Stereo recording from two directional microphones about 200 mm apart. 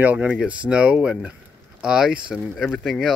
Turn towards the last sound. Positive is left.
turn(degrees=0)  # may be behind; listen again after turning